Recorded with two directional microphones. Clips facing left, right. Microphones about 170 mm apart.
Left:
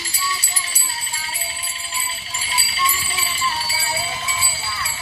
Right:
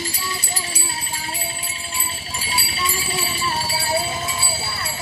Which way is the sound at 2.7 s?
45° right (ahead or behind).